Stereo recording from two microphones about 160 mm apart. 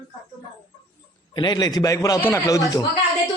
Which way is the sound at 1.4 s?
25° left (ahead or behind).